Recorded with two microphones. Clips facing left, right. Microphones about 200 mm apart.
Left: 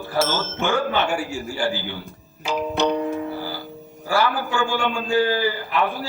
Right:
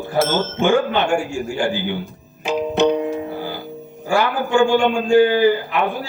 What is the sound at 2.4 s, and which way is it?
Music, 20° right (ahead or behind).